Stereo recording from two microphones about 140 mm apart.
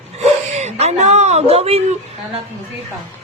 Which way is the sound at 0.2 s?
55° right (ahead or behind).